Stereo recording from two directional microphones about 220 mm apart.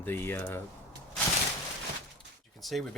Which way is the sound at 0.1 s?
10° left (ahead or behind).